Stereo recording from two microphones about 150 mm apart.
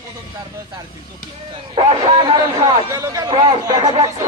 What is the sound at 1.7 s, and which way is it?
A man's voice, 30° right (ahead or behind).